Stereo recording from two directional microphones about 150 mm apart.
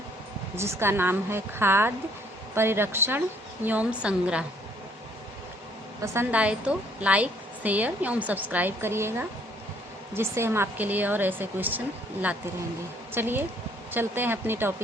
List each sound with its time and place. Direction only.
0.5 s a woman's voice: 15° right (ahead or behind)
6.0 s a woman's voice: 15° right (ahead or behind)
13.1 s a woman's voice: 15° right (ahead or behind)